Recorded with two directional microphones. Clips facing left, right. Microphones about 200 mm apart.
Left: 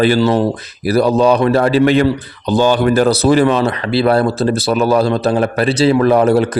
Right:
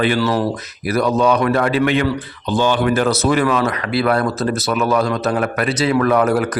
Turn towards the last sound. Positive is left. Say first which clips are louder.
# left 4 dB
turn(degrees=30)  # may be behind; listen again after turning